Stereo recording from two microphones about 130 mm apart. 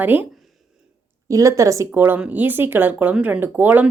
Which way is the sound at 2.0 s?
10° right (ahead or behind).